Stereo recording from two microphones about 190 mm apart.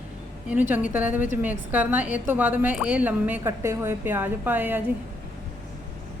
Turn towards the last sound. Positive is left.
turn(degrees=-10)  # may be behind; listen again after turning